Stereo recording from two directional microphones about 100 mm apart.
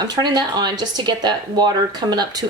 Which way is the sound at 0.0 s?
45° right (ahead or behind).